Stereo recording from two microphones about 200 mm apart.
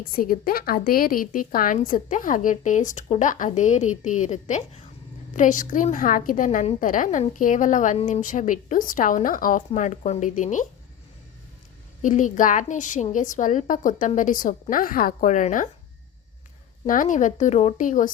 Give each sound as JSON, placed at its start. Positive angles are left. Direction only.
{"t": 0.0, "sound": "a woman's voice", "side_deg": 45}
{"t": 12.0, "sound": "a woman's voice", "side_deg": 40}
{"t": 16.8, "sound": "a woman's voice", "side_deg": 40}